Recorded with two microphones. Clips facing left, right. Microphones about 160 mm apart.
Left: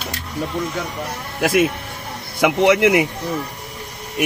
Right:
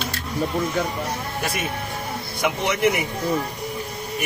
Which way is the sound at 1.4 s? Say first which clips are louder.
Left 14 dB; 90° left.